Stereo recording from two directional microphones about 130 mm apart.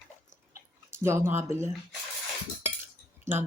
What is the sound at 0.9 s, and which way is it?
Speech, 20° right (ahead or behind).